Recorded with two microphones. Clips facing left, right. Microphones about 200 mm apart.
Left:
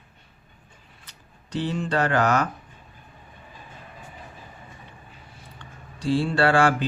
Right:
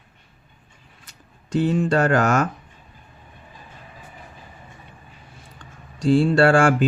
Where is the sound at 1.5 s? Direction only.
50° right (ahead or behind).